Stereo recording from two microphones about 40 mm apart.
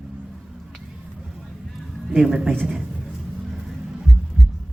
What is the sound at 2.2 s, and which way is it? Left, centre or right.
Speech, centre.